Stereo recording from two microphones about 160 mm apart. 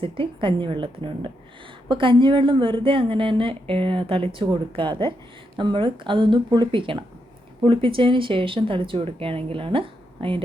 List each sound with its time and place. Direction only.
0.0 s a woman's voice: 35° right (ahead or behind)